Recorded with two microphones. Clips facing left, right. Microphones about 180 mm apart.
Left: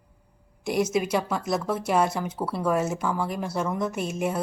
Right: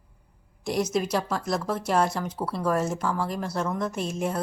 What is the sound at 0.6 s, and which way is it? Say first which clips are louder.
Speech: left 1 dB; 5° left (ahead or behind).